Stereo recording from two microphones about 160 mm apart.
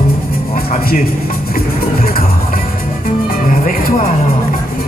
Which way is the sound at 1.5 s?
65° left (ahead or behind).